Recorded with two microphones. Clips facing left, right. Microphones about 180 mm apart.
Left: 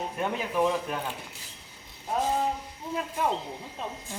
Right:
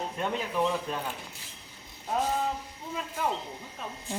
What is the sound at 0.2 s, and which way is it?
Speech, 10° left (ahead or behind).